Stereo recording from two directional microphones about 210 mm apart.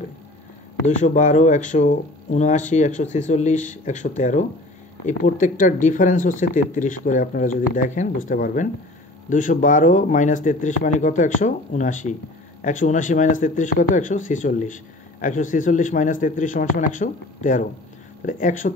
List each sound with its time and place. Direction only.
0.8 s speech: 35° left (ahead or behind)